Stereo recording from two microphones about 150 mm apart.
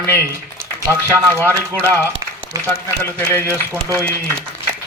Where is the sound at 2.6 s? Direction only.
15° left (ahead or behind).